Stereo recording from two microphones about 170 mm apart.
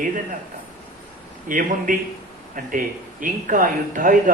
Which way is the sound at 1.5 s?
50° right (ahead or behind).